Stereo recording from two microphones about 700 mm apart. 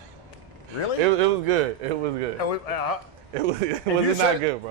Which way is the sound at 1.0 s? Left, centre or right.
Right.